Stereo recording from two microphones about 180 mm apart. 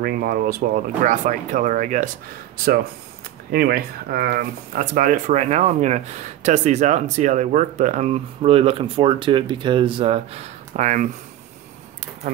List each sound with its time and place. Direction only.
0.0 s speech: 55° right (ahead or behind)
1.0 s speech: 45° right (ahead or behind)